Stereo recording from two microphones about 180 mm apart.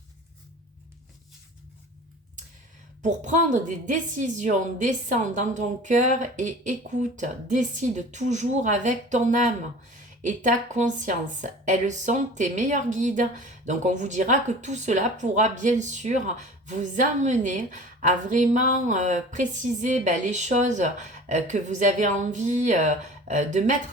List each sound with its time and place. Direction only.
3.0 s speech: 40° right (ahead or behind)